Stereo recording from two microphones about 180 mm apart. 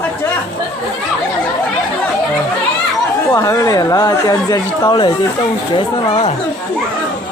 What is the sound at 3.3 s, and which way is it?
Speech, 20° left (ahead or behind).